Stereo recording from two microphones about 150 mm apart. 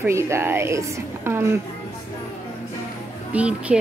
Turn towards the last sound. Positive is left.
turn(degrees=-10)  # may be behind; listen again after turning